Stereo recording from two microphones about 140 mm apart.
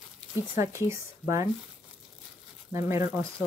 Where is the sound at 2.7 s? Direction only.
20° right (ahead or behind).